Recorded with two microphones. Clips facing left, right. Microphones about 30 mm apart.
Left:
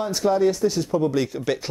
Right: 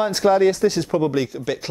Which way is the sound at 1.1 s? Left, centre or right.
Centre.